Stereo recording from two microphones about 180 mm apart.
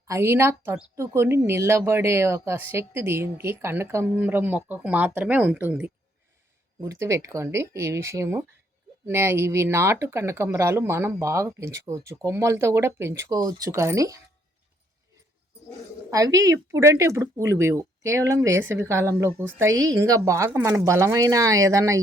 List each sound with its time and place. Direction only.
0.1 s a woman's voice: 15° right (ahead or behind)
16.0 s a woman's voice: 20° right (ahead or behind)